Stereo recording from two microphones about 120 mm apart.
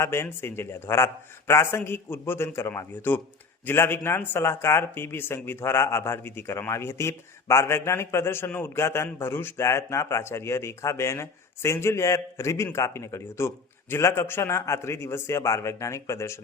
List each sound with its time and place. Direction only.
0.0 s speech: 20° left (ahead or behind)